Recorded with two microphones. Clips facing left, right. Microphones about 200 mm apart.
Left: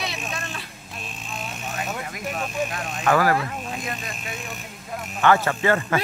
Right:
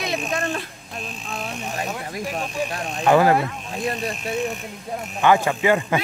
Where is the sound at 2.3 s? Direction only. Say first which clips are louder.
Left 1 dB; 30° right (ahead or behind).